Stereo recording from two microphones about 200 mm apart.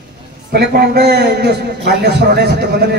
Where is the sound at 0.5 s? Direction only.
55° right (ahead or behind).